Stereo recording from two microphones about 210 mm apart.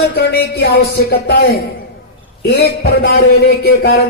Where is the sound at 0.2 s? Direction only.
50° left (ahead or behind).